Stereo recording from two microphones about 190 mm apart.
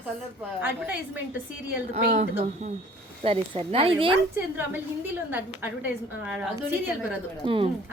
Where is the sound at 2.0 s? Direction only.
50° right (ahead or behind).